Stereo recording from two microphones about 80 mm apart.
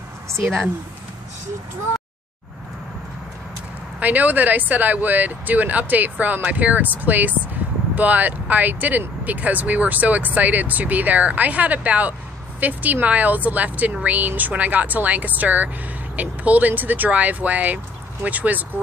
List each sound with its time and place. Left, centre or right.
4.0 s speech: right